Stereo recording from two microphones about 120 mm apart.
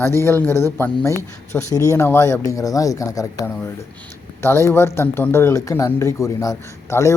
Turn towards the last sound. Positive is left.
turn(degrees=25)  # may be behind; listen again after turning